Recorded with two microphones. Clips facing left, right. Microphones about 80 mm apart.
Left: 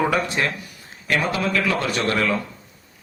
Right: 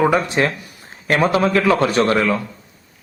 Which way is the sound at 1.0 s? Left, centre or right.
Right.